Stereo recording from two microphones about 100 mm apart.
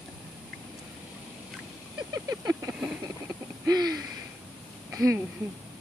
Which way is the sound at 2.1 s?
35° right (ahead or behind).